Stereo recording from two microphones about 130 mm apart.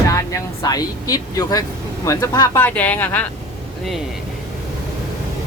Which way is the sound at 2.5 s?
15° left (ahead or behind).